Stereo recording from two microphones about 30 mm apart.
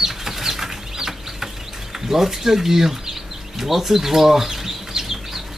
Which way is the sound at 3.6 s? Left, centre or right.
Centre.